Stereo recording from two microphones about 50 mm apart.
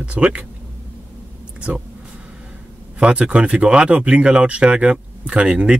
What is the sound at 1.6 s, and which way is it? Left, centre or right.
Speech, right.